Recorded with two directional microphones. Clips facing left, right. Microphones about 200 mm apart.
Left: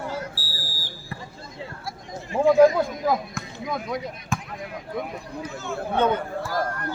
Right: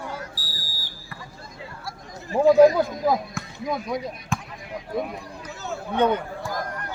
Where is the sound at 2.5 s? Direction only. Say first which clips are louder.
Right 1 dB; 20° right (ahead or behind).